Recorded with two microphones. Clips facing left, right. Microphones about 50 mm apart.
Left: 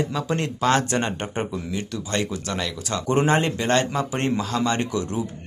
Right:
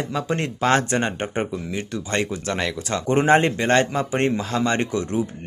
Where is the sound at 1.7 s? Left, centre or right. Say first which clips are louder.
Right 1 dB; right.